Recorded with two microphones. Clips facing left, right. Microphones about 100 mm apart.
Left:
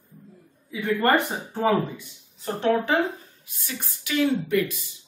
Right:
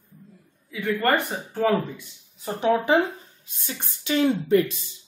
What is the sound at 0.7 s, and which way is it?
Speech, 20° left (ahead or behind).